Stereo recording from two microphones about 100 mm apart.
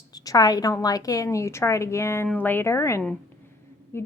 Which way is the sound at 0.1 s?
40° left (ahead or behind).